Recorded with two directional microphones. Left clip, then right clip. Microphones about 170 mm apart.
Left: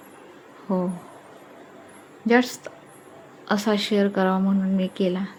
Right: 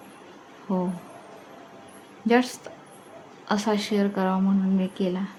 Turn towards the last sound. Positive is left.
turn(degrees=10)  # may be behind; listen again after turning